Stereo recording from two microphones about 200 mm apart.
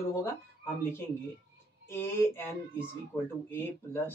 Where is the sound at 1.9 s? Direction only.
10° left (ahead or behind).